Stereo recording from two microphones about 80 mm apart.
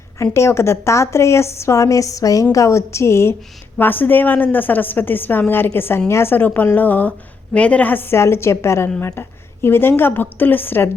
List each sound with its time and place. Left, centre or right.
0.2 s a woman's voice: left
3.8 s a woman's voice: left